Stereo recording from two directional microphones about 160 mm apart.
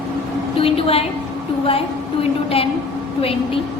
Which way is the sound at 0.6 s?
35° left (ahead or behind).